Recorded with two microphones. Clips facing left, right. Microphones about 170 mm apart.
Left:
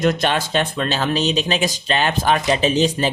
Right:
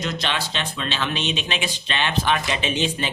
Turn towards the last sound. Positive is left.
turn(degrees=40)  # may be behind; listen again after turning